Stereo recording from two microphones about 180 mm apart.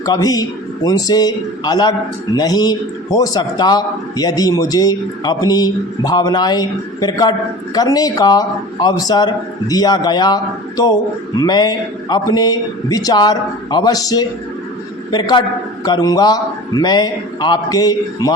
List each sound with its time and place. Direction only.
0.0 s a man's voice: 20° left (ahead or behind)